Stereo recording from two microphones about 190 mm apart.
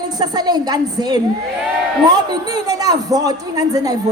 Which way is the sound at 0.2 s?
20° right (ahead or behind).